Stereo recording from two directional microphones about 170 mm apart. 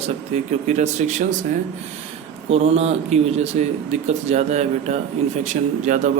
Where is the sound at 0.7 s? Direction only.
45° right (ahead or behind).